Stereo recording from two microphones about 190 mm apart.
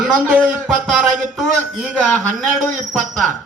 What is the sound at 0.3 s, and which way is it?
Speech, centre (ahead or behind).